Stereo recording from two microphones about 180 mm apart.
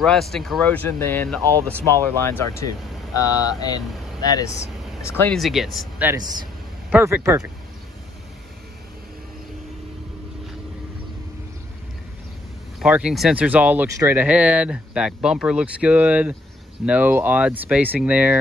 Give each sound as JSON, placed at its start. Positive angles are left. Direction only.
{"t": 0.0, "sound": "speech", "side_deg": 0}
{"t": 5.4, "sound": "speech", "side_deg": 0}
{"t": 12.8, "sound": "speech", "side_deg": -5}